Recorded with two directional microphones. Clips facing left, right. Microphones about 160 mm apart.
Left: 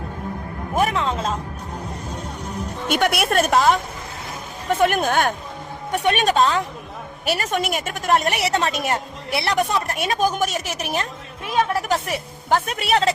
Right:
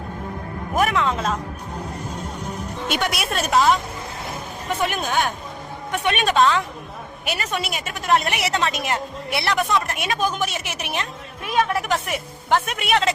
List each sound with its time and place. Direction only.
0.8 s a woman's voice: 30° left (ahead or behind)
2.8 s a woman's voice: 50° left (ahead or behind)
5.9 s a woman's voice: 40° left (ahead or behind)